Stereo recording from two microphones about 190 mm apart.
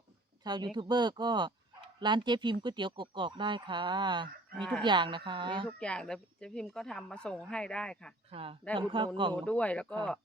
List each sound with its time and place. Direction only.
0.4 s speech: 20° right (ahead or behind)
4.5 s speech: 5° left (ahead or behind)
4.8 s speech: 25° right (ahead or behind)
5.6 s speech: 5° left (ahead or behind)
8.3 s speech: 30° right (ahead or behind)
9.3 s speech: 5° left (ahead or behind)